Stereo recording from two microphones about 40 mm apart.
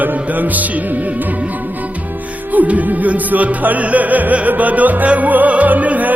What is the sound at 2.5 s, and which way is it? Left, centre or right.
Music, right.